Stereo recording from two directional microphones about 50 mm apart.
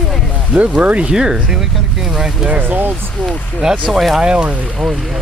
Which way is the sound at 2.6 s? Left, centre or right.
Right.